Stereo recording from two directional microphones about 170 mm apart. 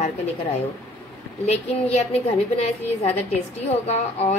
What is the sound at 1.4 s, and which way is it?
A woman's voice, 40° left (ahead or behind).